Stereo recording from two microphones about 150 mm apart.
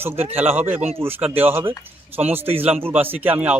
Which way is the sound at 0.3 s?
10° right (ahead or behind).